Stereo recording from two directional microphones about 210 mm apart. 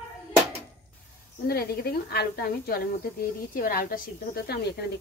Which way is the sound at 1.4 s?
45° left (ahead or behind).